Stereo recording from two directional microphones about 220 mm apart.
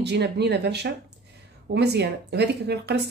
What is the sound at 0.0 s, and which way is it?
Speech, 50° right (ahead or behind).